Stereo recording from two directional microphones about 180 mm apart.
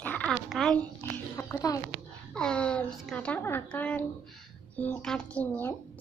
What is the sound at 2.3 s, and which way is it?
A woman's voice, 5° left (ahead or behind).